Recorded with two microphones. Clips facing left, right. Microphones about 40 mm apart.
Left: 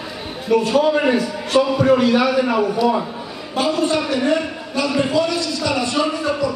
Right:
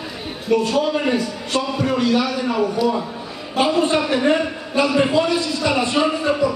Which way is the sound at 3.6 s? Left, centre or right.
Right.